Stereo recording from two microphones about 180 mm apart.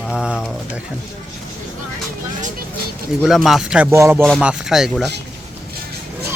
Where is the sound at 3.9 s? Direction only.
15° right (ahead or behind).